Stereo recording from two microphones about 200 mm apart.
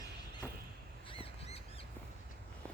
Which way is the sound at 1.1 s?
30° left (ahead or behind).